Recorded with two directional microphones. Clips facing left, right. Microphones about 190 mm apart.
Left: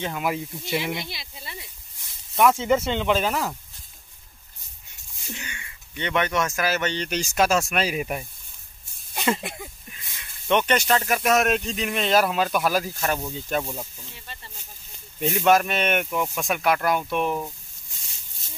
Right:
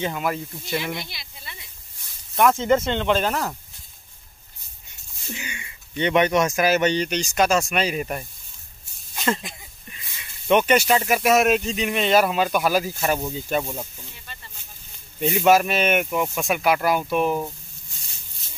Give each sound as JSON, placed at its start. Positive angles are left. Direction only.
{"t": 0.0, "sound": "speech", "side_deg": 5}
{"t": 1.1, "sound": "speech", "side_deg": 30}
{"t": 2.3, "sound": "speech", "side_deg": 5}
{"t": 5.3, "sound": "speech", "side_deg": -5}
{"t": 5.6, "sound": "speech", "side_deg": -20}
{"t": 7.1, "sound": "speech", "side_deg": 5}
{"t": 9.4, "sound": "speech", "side_deg": 60}
{"t": 10.5, "sound": "speech", "side_deg": -10}
{"t": 15.1, "sound": "speech", "side_deg": 0}